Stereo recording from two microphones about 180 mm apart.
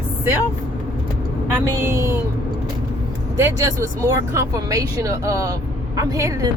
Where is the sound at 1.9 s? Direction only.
15° right (ahead or behind).